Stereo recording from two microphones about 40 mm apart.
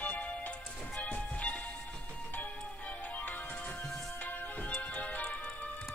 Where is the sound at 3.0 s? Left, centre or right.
Left.